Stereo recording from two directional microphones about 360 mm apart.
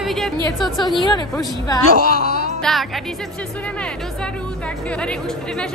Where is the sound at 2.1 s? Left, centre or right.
Left.